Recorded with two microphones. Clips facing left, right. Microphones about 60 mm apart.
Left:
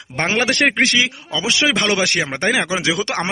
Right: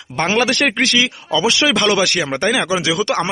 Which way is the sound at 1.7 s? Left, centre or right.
Left.